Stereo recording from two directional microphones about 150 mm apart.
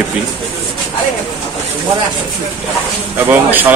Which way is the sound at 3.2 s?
10° right (ahead or behind).